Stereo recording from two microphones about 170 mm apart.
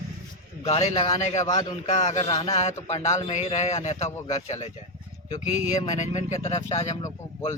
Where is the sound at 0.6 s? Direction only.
35° left (ahead or behind).